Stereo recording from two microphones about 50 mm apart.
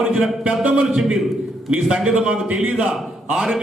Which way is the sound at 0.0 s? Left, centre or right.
Centre.